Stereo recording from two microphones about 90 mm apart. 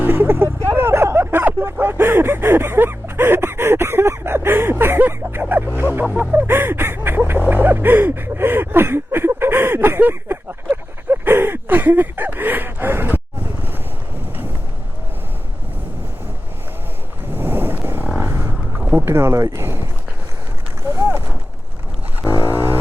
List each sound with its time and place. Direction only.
0.0 s vehicle: 25° right (ahead or behind)
1.8 s a sound: 25° right (ahead or behind)
17.3 s vehicle: 25° right (ahead or behind)
18.8 s boat: 20° right (ahead or behind)
22.4 s vehicle: 25° right (ahead or behind)